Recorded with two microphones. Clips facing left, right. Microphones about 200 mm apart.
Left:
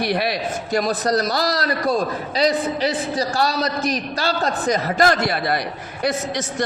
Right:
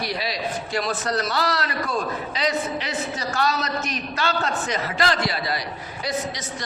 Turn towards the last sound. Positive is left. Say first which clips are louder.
# left 6 dB
turn(degrees=60)  # may be behind; listen again after turning